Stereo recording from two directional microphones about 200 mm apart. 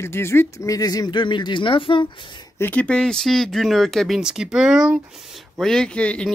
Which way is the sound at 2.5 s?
10° left (ahead or behind).